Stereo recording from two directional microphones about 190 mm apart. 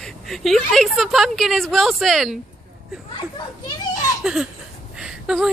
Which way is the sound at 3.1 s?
20° left (ahead or behind).